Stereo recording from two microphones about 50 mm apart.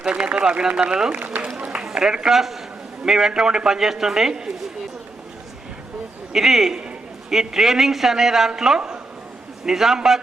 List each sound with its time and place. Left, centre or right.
0.0 s a man's voice: right
1.5 s run: right
1.8 s a man's voice: centre
6.3 s a man's voice: centre